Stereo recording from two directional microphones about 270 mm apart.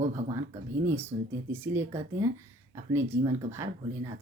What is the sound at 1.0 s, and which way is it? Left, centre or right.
Speech, centre.